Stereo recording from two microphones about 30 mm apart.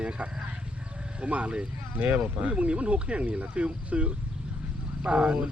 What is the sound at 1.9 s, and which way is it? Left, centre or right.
Speech, right.